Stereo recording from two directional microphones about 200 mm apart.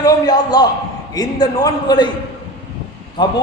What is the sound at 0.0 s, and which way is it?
A man's voice, 20° left (ahead or behind).